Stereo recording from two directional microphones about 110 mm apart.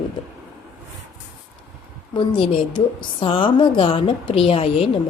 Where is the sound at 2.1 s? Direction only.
45° left (ahead or behind).